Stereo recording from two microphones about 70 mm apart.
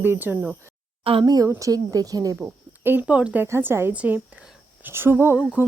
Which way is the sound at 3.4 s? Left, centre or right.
Right.